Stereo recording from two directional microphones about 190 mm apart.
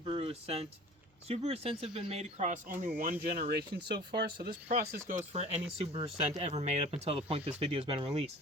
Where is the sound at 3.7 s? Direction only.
60° right (ahead or behind).